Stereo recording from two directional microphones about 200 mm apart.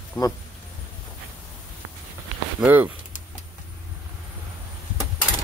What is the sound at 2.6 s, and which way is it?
Speech, 10° right (ahead or behind).